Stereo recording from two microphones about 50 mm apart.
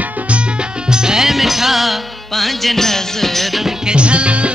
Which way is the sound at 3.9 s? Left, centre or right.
Right.